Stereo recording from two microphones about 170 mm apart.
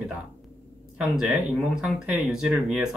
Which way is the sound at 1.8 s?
Centre (ahead or behind).